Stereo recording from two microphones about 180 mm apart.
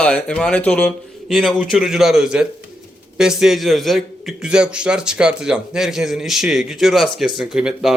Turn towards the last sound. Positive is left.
turn(degrees=-5)  # may be behind; listen again after turning